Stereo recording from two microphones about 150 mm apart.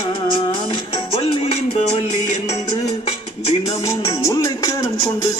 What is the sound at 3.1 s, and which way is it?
Music, 40° left (ahead or behind).